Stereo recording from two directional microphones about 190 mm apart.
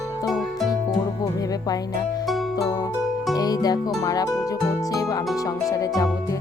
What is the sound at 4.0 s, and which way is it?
Speech, 20° left (ahead or behind).